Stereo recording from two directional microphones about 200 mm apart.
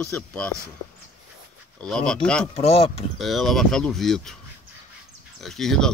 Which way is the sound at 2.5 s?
30° left (ahead or behind).